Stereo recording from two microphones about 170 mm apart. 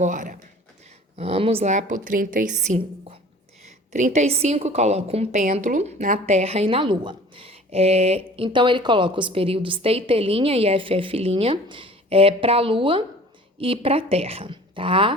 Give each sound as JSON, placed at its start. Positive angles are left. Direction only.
{"t": 0.0, "sound": "a woman's voice", "side_deg": -50}
{"t": 1.1, "sound": "a woman's voice", "side_deg": -35}